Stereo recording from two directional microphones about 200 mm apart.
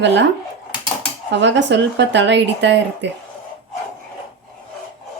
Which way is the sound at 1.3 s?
60° right (ahead or behind).